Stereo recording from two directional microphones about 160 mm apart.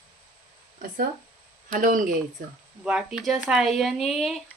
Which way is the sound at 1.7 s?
55° right (ahead or behind).